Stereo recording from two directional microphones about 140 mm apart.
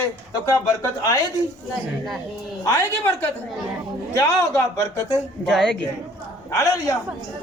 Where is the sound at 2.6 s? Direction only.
20° left (ahead or behind).